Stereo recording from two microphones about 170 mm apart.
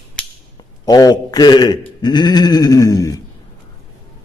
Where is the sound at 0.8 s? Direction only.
20° left (ahead or behind).